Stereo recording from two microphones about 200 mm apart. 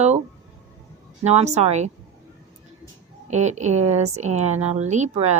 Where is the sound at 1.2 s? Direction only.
35° right (ahead or behind).